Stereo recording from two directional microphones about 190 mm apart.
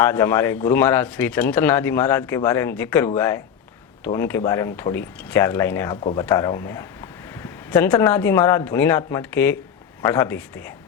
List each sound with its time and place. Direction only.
0.0 s speech: 10° left (ahead or behind)